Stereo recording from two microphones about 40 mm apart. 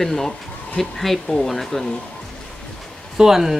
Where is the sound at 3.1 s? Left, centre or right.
Centre.